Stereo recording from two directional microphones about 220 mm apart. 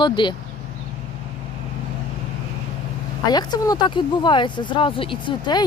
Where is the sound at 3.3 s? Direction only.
20° left (ahead or behind).